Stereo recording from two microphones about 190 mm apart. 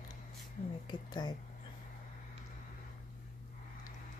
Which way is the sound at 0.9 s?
20° left (ahead or behind).